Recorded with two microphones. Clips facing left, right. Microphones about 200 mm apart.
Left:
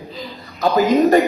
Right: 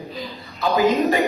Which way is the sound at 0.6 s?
45° left (ahead or behind).